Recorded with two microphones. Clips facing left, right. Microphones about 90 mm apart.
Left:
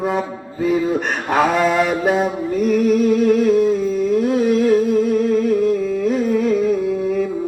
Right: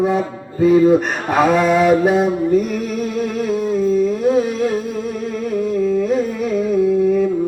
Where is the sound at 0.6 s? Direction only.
Centre (ahead or behind).